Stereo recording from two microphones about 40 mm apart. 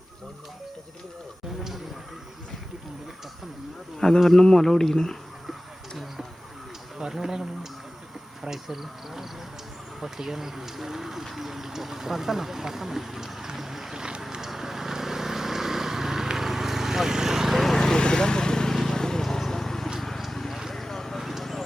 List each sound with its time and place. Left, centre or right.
4.0 s speech: centre
7.0 s speech: centre
14.4 s vehicle: centre
17.6 s vehicle: centre
20.7 s a sound: centre